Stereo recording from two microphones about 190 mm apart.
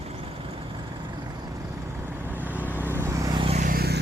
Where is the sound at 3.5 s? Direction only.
50° right (ahead or behind).